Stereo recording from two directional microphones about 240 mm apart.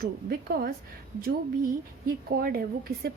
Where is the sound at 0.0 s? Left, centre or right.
Right.